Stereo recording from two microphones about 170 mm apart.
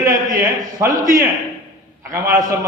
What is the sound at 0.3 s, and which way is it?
A man's voice, 15° right (ahead or behind).